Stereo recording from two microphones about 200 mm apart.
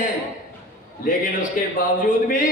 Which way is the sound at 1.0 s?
45° left (ahead or behind).